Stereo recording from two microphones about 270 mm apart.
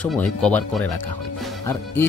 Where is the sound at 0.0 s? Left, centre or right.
Centre.